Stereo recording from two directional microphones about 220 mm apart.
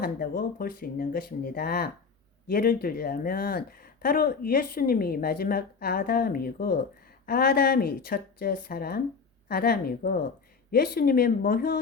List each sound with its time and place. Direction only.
0.0 s speech: 40° left (ahead or behind)